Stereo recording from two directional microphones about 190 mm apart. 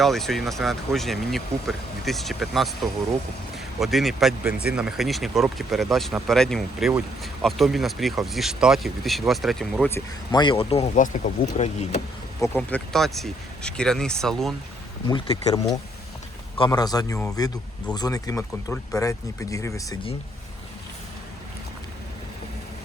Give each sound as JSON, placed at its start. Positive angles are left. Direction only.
{"t": 0.0, "sound": "speech", "side_deg": 0}
{"t": 9.9, "sound": "speech", "side_deg": 25}
{"t": 12.4, "sound": "speech", "side_deg": 10}
{"t": 15.0, "sound": "speech", "side_deg": 30}